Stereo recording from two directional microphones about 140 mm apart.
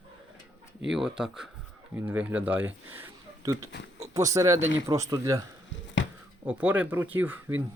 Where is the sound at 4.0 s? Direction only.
25° right (ahead or behind).